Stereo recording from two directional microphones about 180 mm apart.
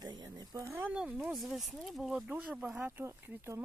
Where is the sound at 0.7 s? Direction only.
10° right (ahead or behind).